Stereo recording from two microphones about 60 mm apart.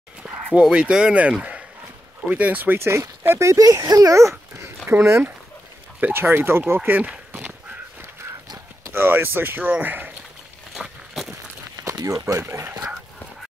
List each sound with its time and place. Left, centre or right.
0.2 s dog: right
0.6 s speech: centre; by 2.9 s right
3.3 s speech: right
3.5 s speech: right
4.8 s speech: right
8.9 s speech: right
12.0 s speech: right